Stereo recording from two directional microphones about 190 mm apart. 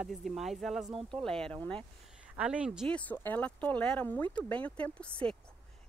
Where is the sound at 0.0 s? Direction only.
Centre (ahead or behind).